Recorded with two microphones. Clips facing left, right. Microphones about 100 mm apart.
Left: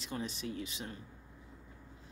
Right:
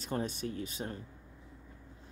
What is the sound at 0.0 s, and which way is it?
Speech, 45° right (ahead or behind).